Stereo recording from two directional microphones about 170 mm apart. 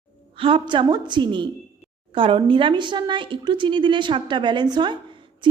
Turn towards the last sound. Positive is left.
turn(degrees=-25)  # may be behind; listen again after turning